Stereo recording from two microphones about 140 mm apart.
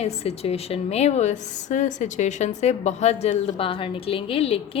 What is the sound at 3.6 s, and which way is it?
A woman's voice, 40° left (ahead or behind).